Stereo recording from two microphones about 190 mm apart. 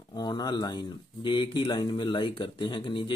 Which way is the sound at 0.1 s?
20° left (ahead or behind).